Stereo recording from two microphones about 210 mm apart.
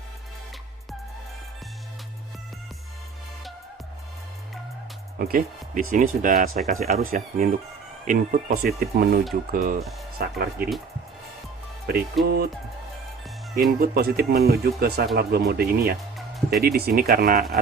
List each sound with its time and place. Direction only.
5.2 s speech: 40° right (ahead or behind)
12.2 s speech: centre (ahead or behind)
13.6 s speech: 45° right (ahead or behind)